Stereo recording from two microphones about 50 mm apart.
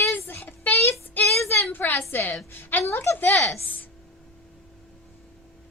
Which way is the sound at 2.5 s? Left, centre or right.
Left.